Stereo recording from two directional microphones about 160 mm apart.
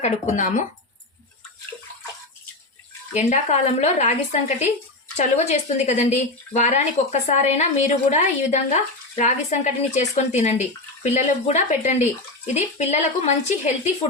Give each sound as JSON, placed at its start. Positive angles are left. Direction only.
{"t": 0.0, "sound": "speech", "side_deg": 50}
{"t": 3.1, "sound": "speech", "side_deg": 45}